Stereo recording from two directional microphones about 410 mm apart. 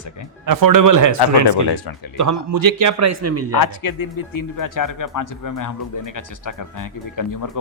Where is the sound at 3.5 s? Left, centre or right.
Left.